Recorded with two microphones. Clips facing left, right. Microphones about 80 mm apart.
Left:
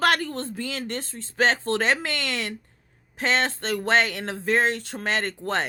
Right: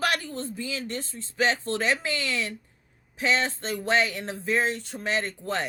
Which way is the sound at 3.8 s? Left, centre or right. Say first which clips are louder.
Left 2 dB; left.